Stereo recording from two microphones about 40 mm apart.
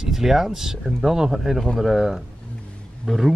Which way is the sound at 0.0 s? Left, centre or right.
Centre.